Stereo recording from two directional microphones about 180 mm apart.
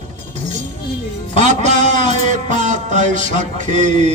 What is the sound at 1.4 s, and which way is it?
Music, 40° right (ahead or behind).